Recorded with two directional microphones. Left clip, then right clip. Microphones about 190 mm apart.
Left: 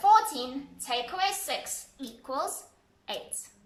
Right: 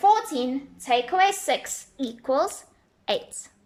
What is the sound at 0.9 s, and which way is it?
A woman's voice, 40° right (ahead or behind).